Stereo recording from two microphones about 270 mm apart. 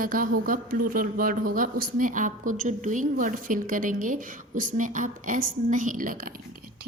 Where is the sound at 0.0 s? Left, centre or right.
Right.